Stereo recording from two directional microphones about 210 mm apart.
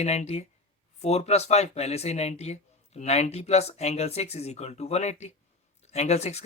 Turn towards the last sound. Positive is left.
turn(degrees=30)  # may be behind; listen again after turning